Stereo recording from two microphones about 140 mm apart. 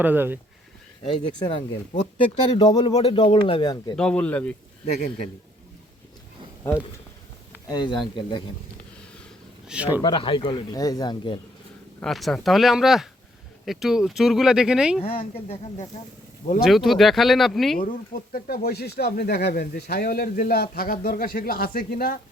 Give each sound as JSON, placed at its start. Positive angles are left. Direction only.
{"t": 0.0, "sound": "speech", "side_deg": -15}
{"t": 1.1, "sound": "speech", "side_deg": 35}
{"t": 3.0, "sound": "speech", "side_deg": 40}
{"t": 3.9, "sound": "speech", "side_deg": 5}
{"t": 4.9, "sound": "speech", "side_deg": 50}
{"t": 7.7, "sound": "speech", "side_deg": 30}
{"t": 8.8, "sound": "a sound", "side_deg": 10}
{"t": 9.6, "sound": "speech", "side_deg": -10}
{"t": 10.0, "sound": "speech", "side_deg": 35}
{"t": 12.0, "sound": "speech", "side_deg": 0}
{"t": 15.0, "sound": "speech", "side_deg": 45}
{"t": 16.6, "sound": "speech", "side_deg": 0}
{"t": 17.7, "sound": "speech", "side_deg": 85}